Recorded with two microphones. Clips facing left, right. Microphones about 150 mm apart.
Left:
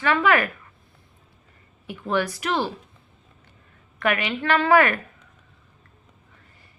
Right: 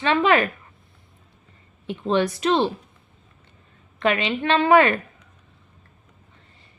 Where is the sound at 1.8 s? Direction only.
25° right (ahead or behind).